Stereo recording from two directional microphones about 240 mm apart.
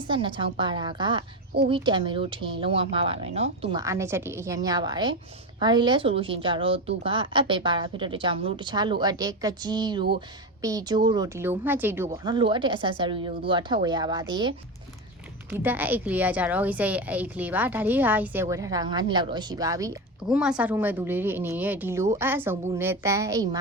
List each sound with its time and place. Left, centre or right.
0.1 s a woman's voice: right
15.5 s a woman's voice: centre
20.2 s a woman's voice: centre